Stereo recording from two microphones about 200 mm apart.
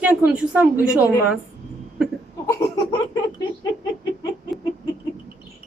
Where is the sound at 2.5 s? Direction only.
15° left (ahead or behind).